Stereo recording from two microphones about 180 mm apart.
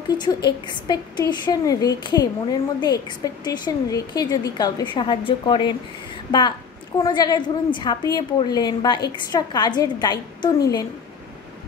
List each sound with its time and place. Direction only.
0.8 s a woman's voice: 25° left (ahead or behind)
7.0 s a woman's voice: 25° left (ahead or behind)